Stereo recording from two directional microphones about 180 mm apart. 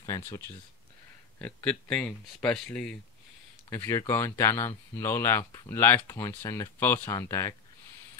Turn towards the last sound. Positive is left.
turn(degrees=15)  # may be behind; listen again after turning